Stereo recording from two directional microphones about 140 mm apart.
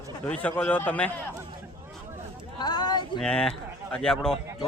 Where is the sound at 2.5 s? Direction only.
30° left (ahead or behind).